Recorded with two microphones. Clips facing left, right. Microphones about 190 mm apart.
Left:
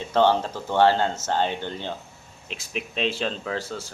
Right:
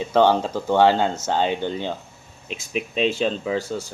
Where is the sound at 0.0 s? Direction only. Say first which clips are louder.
Right 3 dB; 15° right (ahead or behind).